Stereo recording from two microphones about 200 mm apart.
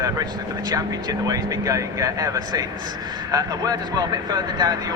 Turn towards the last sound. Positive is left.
turn(degrees=-20)  # may be behind; listen again after turning